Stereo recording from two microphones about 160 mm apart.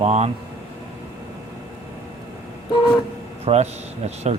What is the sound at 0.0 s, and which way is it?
Speech, 40° right (ahead or behind).